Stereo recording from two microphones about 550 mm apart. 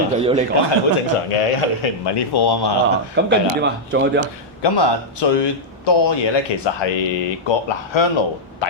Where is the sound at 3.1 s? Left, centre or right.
Centre.